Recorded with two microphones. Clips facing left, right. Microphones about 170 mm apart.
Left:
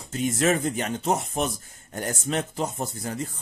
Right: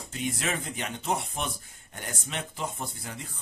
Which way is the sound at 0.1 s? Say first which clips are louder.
Left 9 dB; 45° left (ahead or behind).